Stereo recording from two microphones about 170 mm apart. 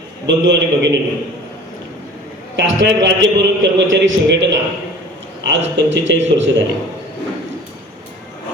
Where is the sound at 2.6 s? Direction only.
90° right.